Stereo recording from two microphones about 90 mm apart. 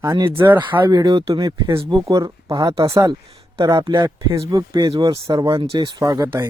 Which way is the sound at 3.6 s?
50° right (ahead or behind).